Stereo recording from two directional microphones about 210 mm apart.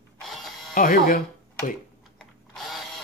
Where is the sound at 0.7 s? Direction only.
40° left (ahead or behind).